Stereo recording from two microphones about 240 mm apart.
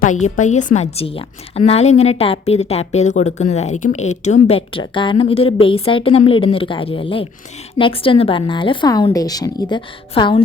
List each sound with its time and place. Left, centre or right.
0.3 s a woman's voice: left